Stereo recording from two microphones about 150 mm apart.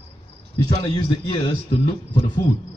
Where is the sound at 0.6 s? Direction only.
30° left (ahead or behind).